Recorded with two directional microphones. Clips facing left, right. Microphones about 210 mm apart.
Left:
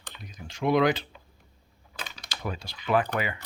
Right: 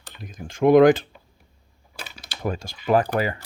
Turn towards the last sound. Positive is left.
turn(degrees=-45)  # may be behind; listen again after turning